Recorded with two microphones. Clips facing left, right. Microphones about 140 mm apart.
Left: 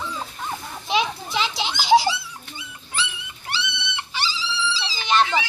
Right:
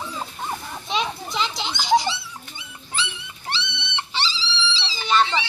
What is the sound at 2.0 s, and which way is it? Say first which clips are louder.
Dog: left 3 dB; 25° right (ahead or behind).